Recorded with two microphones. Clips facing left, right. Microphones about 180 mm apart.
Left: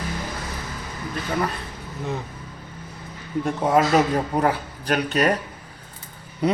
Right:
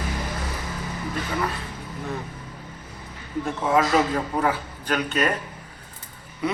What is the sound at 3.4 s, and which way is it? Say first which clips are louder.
A man's voice: left 2 dB; 35° left (ahead or behind).